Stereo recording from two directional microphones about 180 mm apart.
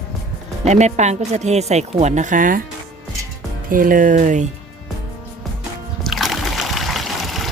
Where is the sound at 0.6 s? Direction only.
40° right (ahead or behind).